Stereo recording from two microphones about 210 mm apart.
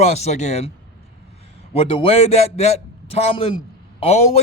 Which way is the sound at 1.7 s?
30° left (ahead or behind).